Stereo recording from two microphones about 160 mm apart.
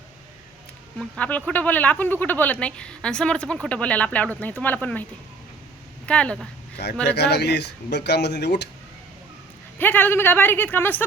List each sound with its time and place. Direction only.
0.9 s speech: 5° left (ahead or behind)
6.1 s speech: 5° left (ahead or behind)
7.0 s speech: 90° left
9.7 s speech: 10° left (ahead or behind)